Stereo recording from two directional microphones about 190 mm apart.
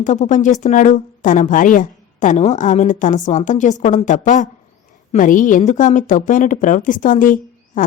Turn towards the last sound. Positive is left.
turn(degrees=45)  # may be behind; listen again after turning